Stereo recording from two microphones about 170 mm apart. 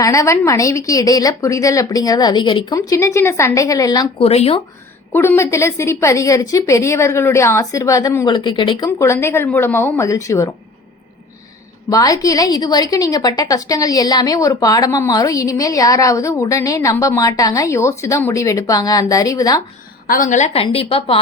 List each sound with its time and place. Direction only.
0.0 s a woman's voice: 20° left (ahead or behind)
4.2 s a woman's voice: 35° left (ahead or behind)
5.1 s a woman's voice: 15° left (ahead or behind)
8.3 s a woman's voice: 30° left (ahead or behind)
11.9 s a woman's voice: 20° left (ahead or behind)
20.1 s a woman's voice: 55° left (ahead or behind); by 21.2 s 35° left (ahead or behind)